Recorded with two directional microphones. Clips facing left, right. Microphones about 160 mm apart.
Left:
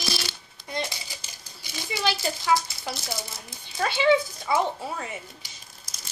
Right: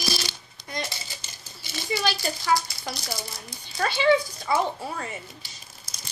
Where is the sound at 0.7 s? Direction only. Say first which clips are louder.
Left 2 dB; 25° left (ahead or behind).